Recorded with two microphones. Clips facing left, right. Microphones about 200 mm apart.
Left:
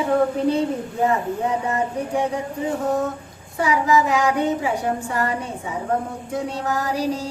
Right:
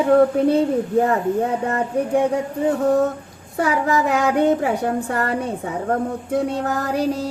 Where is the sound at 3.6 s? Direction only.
55° right (ahead or behind).